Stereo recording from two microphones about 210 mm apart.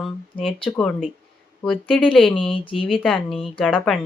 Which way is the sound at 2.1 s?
Centre (ahead or behind).